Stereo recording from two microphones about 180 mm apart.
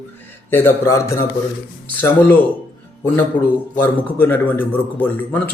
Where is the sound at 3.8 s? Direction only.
10° left (ahead or behind).